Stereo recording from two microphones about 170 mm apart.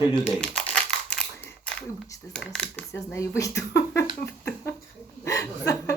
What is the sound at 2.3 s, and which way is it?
Speech, 5° left (ahead or behind).